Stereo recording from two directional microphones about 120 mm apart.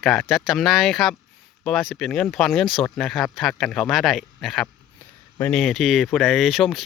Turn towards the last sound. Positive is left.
turn(degrees=0)  # may be behind; listen again after turning